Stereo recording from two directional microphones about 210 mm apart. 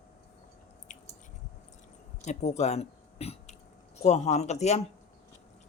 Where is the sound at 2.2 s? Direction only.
30° left (ahead or behind).